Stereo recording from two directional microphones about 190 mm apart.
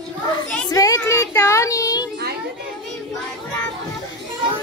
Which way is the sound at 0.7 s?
20° left (ahead or behind).